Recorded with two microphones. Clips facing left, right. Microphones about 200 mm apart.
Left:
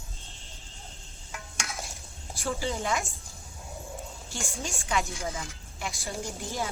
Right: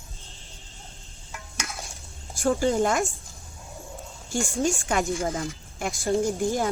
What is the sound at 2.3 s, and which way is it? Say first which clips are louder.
Speech: right 9 dB; 50° right (ahead or behind).